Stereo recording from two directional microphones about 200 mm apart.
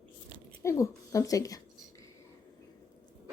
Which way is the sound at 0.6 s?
15° left (ahead or behind).